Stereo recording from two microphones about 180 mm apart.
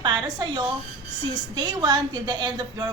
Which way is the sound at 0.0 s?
25° right (ahead or behind).